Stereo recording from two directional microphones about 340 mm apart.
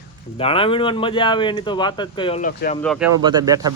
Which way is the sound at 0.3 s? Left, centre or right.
Centre.